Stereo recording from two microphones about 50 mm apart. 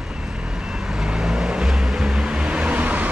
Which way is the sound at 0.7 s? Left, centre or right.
Centre.